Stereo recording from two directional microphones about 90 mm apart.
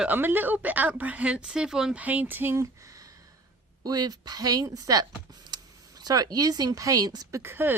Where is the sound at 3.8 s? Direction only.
45° right (ahead or behind).